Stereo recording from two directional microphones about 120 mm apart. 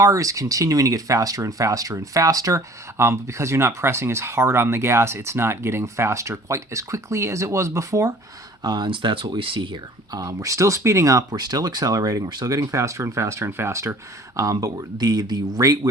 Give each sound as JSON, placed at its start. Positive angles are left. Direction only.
{"t": 0.0, "sound": "speech", "side_deg": -25}
{"t": 8.6, "sound": "speech", "side_deg": -35}